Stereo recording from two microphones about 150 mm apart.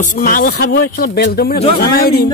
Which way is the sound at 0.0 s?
65° left (ahead or behind).